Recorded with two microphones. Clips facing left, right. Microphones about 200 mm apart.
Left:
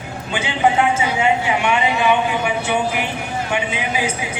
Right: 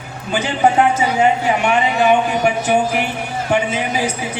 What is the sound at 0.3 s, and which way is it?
Speech, 40° right (ahead or behind).